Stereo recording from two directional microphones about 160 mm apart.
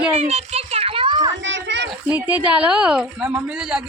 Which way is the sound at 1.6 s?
90° right.